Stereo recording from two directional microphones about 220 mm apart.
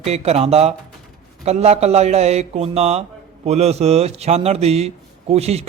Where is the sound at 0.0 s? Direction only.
30° right (ahead or behind).